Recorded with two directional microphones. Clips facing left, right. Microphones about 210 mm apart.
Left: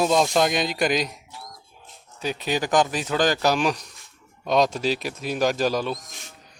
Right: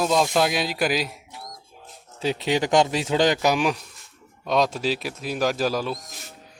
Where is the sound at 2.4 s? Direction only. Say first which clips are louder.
Right 1 dB; 25° right (ahead or behind); by 6.3 s centre (ahead or behind).